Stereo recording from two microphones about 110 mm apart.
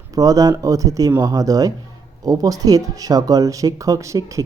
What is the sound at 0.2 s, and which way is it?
Speech, 35° right (ahead or behind).